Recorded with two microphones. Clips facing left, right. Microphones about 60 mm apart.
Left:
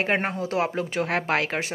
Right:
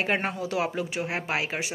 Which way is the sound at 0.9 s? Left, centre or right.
Left.